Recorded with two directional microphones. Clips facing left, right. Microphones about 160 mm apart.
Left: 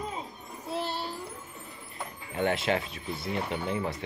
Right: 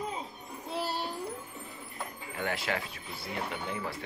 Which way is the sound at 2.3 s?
25° left (ahead or behind).